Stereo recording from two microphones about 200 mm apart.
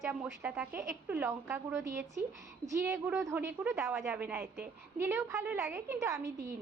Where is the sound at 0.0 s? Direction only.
10° right (ahead or behind).